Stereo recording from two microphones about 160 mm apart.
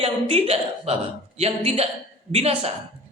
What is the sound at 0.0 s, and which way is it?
A woman's voice, 35° right (ahead or behind).